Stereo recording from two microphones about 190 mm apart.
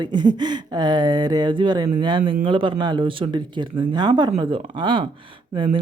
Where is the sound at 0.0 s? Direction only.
25° right (ahead or behind).